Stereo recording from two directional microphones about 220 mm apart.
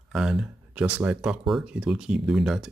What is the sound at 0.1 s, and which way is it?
Speech, centre (ahead or behind).